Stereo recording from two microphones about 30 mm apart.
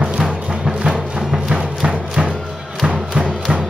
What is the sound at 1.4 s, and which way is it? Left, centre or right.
Music, right.